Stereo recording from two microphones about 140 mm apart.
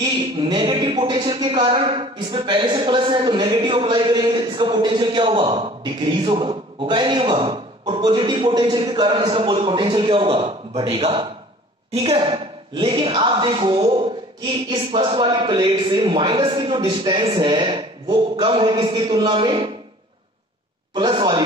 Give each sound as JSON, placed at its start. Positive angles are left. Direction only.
{"t": 0.0, "sound": "speech", "side_deg": -30}
{"t": 20.9, "sound": "speech", "side_deg": -30}